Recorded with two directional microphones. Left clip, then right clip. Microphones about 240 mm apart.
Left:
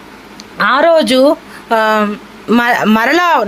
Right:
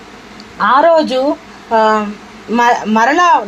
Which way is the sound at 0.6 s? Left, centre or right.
Left.